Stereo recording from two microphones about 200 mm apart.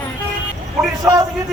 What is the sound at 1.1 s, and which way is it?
Speech, 10° right (ahead or behind).